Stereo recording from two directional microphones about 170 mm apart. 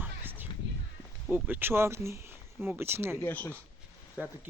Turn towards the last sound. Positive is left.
turn(degrees=-10)  # may be behind; listen again after turning